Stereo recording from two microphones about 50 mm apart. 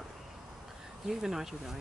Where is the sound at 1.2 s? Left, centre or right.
Centre.